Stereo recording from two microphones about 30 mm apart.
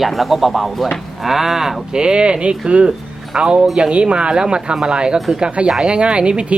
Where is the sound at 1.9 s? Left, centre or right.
Right.